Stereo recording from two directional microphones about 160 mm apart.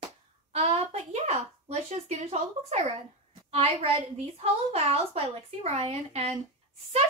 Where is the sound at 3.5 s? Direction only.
40° right (ahead or behind).